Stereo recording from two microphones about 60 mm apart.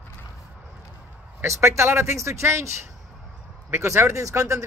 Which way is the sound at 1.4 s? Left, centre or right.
Right.